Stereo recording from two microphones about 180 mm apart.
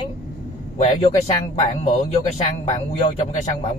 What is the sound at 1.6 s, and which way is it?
Speech, 35° left (ahead or behind).